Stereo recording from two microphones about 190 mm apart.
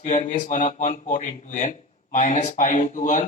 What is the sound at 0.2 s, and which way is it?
A man's voice, 40° left (ahead or behind).